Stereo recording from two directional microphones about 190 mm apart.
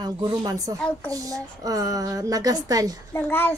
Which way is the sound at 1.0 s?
20° right (ahead or behind).